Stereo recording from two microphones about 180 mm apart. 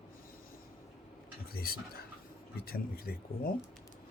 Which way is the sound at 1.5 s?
55° left (ahead or behind).